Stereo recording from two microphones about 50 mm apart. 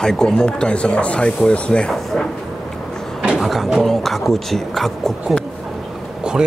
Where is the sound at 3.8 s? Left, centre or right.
Centre.